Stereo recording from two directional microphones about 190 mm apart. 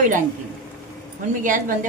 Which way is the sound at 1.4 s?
45° right (ahead or behind).